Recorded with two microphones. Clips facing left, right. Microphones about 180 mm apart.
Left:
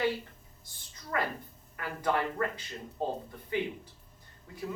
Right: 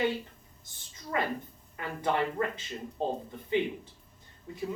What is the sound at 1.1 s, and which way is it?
Speech, 20° right (ahead or behind).